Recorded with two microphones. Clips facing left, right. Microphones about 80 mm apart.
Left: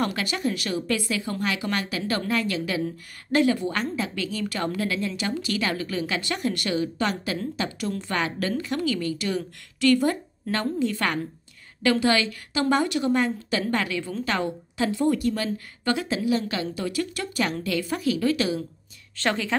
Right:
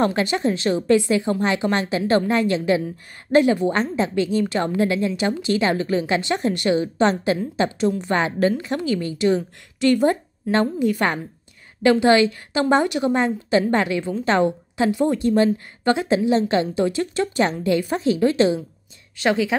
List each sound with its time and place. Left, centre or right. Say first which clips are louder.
0.0 s a woman's voice: right 6 dB; right
19.1 s a woman's voice: right 6 dB; centre